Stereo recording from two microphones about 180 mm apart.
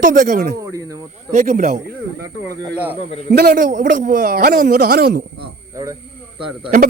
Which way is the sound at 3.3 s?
55° right (ahead or behind).